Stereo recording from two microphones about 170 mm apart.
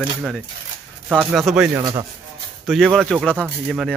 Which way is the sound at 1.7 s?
25° right (ahead or behind).